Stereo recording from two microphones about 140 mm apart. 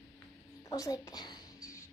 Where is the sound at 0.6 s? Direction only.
25° left (ahead or behind).